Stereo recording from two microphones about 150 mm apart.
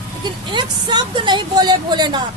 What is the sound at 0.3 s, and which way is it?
Speech, 30° right (ahead or behind).